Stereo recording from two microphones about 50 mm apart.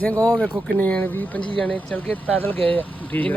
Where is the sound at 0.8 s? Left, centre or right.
Left.